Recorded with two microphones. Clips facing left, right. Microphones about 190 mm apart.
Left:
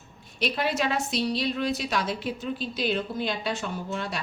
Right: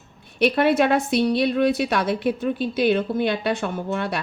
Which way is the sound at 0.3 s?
60° right (ahead or behind).